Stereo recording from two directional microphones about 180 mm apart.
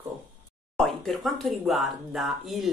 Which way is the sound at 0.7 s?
Centre (ahead or behind).